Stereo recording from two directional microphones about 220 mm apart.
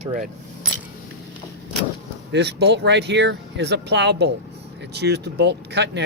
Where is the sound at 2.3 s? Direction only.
50° right (ahead or behind).